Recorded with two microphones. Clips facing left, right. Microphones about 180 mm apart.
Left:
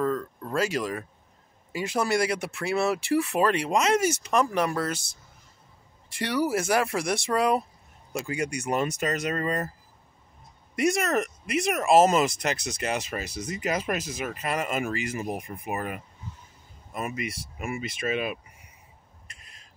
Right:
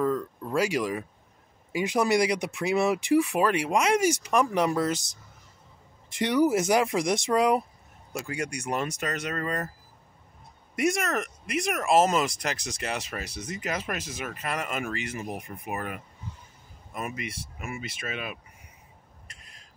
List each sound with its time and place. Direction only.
0.0 s a sound: 10° right (ahead or behind)
1.7 s speech: 15° right (ahead or behind)
8.1 s speech: 5° left (ahead or behind)
10.8 s speech: centre (ahead or behind)
13.7 s speech: 30° left (ahead or behind)
14.2 s speech: 10° left (ahead or behind)